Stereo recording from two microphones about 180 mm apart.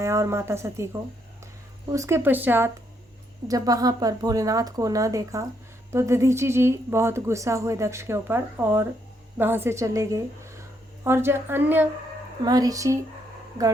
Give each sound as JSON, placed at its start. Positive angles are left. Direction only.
{"t": 0.0, "sound": "a woman's voice", "side_deg": -15}
{"t": 1.9, "sound": "a woman's voice", "side_deg": -15}